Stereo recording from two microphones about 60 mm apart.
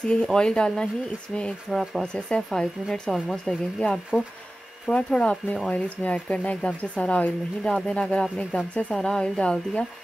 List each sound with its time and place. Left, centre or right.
0.0 s speech: centre
4.8 s speech: centre